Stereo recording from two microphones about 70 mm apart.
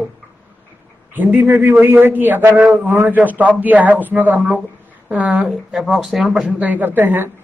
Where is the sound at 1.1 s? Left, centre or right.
Right.